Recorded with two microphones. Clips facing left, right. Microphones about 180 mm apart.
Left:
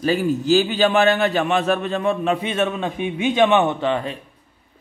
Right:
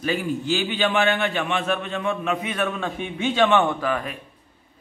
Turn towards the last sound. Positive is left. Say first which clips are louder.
# left 3 dB
turn(degrees=25)  # may be behind; listen again after turning